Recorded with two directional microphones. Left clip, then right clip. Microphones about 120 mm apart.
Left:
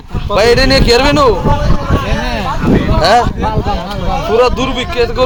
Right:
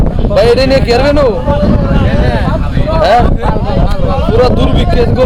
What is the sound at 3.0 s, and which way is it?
Speech, 15° right (ahead or behind).